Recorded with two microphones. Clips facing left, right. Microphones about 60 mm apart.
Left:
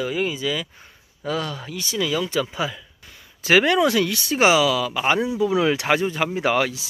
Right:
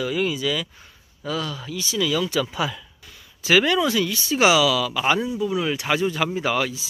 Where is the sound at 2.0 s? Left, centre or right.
Left.